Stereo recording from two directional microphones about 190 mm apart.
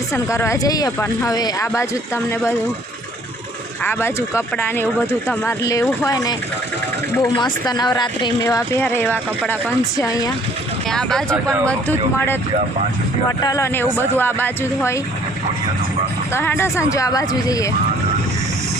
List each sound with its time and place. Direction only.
0.1 s speech: 15° left (ahead or behind)
3.8 s speech: 10° left (ahead or behind)
10.8 s speech: 5° left (ahead or behind)
16.3 s speech: 10° left (ahead or behind)